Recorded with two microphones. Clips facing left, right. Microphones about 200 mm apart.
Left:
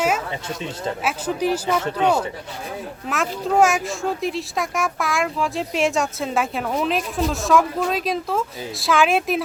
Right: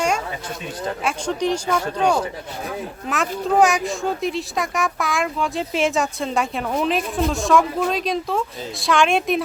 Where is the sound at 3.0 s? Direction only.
Centre (ahead or behind).